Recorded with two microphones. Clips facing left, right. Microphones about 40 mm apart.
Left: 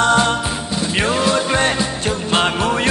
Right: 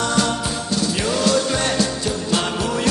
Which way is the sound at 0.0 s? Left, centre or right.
Left.